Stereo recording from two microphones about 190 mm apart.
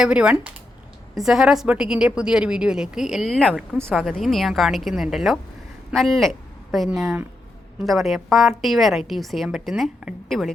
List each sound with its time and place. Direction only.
0.0 s a woman's voice: 5° right (ahead or behind)